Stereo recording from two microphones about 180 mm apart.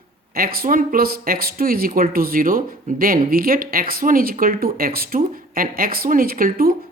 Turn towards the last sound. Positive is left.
turn(degrees=-55)  # may be behind; listen again after turning